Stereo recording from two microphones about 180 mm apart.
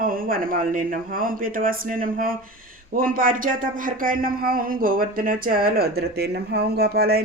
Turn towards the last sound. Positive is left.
turn(degrees=-60)  # may be behind; listen again after turning